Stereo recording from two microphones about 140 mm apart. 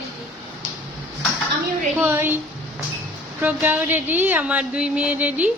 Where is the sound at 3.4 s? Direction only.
10° right (ahead or behind).